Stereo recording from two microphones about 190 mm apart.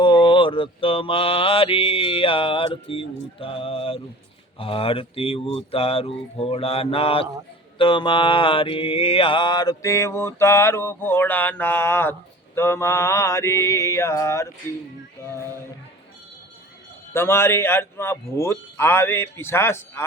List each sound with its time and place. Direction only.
0.0 s mantra: 25° left (ahead or behind)
2.9 s speech: 30° left (ahead or behind)
5.5 s mantra: 30° left (ahead or behind); by 15.4 s 15° left (ahead or behind)
17.2 s mantra: 10° left (ahead or behind)